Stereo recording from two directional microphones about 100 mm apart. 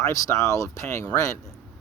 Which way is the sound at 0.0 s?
30° left (ahead or behind).